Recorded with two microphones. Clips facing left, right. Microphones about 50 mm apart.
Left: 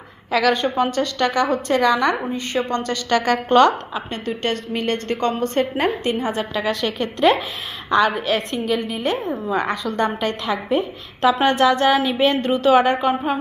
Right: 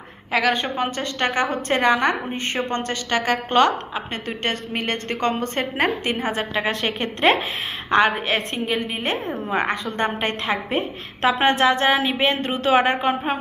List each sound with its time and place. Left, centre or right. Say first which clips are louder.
0.3 s a woman's voice: left 3 dB; right
3.1 s a woman's voice: left 4 dB; centre
4.3 s a woman's voice: left 4 dB; right; by 13.1 s centre